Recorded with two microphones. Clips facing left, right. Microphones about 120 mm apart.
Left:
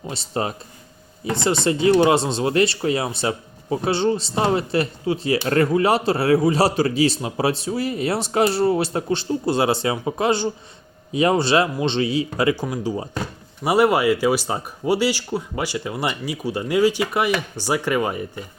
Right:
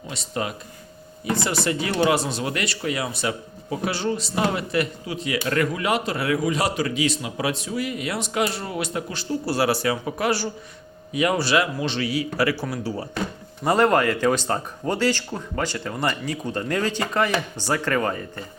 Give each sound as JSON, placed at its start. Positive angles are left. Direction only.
{"t": 0.1, "sound": "speech", "side_deg": 30}